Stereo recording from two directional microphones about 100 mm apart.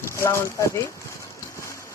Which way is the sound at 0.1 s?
25° left (ahead or behind).